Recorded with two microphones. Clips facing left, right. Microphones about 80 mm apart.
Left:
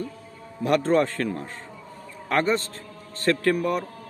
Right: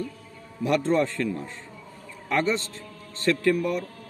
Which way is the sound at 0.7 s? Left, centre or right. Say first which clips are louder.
Left 2 dB; left.